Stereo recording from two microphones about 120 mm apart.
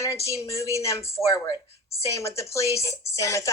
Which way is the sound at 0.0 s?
25° left (ahead or behind).